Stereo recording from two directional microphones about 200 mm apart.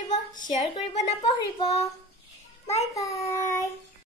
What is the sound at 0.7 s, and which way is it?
Speech, 25° left (ahead or behind).